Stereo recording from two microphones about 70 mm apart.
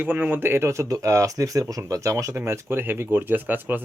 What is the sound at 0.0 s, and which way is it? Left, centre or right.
Speech, right.